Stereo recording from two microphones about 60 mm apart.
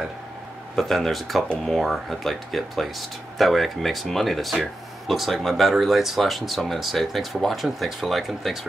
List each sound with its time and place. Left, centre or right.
0.7 s speech: centre